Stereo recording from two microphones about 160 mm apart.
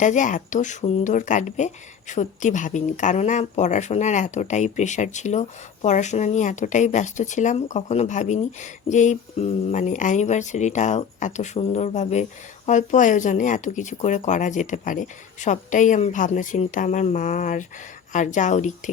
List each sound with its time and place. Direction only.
0.0 s speech: 50° left (ahead or behind)